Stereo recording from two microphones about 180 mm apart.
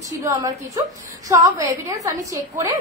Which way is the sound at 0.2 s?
20° right (ahead or behind).